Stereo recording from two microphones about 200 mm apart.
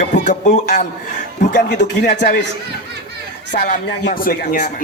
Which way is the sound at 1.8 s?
55° left (ahead or behind).